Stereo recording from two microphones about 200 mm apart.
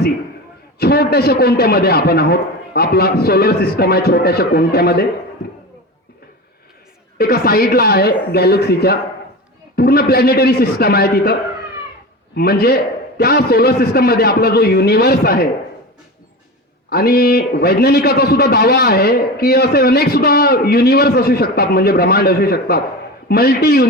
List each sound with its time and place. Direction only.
0.8 s a man's voice: 50° left (ahead or behind)
7.2 s a man's voice: 50° left (ahead or behind)
16.9 s a man's voice: 50° left (ahead or behind)